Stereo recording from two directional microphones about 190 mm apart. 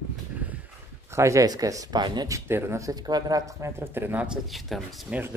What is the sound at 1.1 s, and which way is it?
Speech, 15° right (ahead or behind).